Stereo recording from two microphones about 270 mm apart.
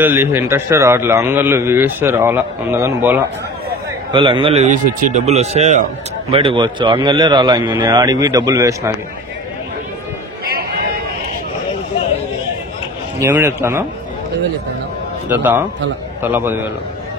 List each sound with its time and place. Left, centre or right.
0.0 s a man's voice: centre
4.1 s a man's voice: centre
13.2 s a man's voice: centre
15.2 s a man's voice: centre